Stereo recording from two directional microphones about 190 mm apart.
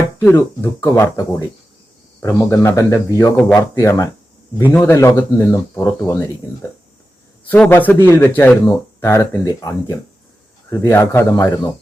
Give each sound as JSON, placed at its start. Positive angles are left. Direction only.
{"t": 0.2, "sound": "speech", "side_deg": 10}